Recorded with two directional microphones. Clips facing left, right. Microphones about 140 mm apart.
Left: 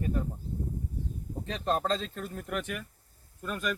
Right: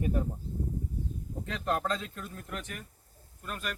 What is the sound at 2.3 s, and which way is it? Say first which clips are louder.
Speech: left 6 dB; 65° left (ahead or behind).